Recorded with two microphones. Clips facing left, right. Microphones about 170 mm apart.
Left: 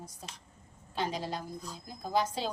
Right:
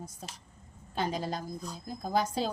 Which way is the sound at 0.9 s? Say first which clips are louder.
Right 2 dB; 45° right (ahead or behind).